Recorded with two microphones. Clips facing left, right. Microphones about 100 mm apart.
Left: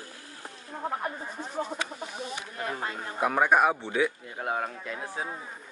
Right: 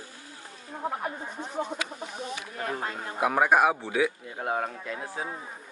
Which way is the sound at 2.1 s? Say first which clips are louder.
Right 2 dB; centre (ahead or behind).